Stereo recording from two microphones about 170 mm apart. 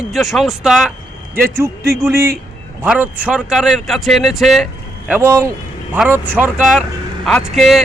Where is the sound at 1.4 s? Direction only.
15° right (ahead or behind).